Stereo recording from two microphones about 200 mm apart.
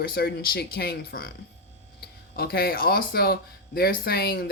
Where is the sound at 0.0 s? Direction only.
50° left (ahead or behind).